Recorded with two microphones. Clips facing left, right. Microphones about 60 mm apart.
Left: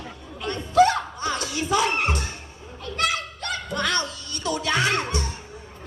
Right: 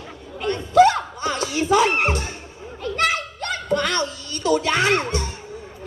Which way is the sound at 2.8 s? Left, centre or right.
Right.